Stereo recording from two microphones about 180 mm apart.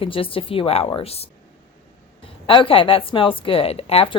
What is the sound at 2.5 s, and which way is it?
Speech, 30° left (ahead or behind).